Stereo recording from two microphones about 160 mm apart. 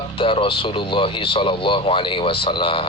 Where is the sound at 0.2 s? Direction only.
35° left (ahead or behind).